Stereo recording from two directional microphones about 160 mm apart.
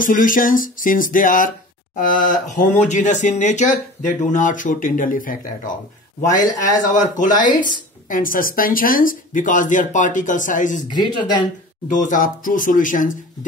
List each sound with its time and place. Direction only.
0.0 s speech: 55° left (ahead or behind)
6.9 s speech: 55° left (ahead or behind)
10.9 s speech: 30° left (ahead or behind)
11.9 s speech: 55° left (ahead or behind)